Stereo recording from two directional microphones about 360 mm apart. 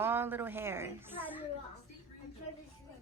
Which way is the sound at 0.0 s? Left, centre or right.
Centre.